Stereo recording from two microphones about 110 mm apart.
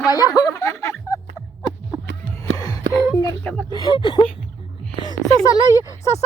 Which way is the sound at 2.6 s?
35° left (ahead or behind).